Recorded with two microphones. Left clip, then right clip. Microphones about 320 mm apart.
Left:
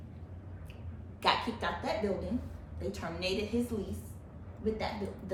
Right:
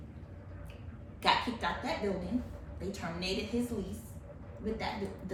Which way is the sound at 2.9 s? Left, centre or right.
Centre.